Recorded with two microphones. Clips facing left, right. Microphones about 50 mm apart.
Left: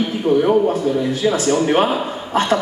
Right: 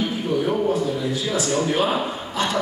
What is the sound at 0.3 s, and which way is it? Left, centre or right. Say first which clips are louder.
A man's voice: left 7 dB; left.